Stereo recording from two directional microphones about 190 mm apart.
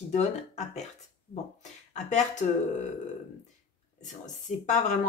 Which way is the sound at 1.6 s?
40° left (ahead or behind).